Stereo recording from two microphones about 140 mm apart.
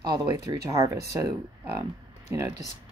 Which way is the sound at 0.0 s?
30° right (ahead or behind).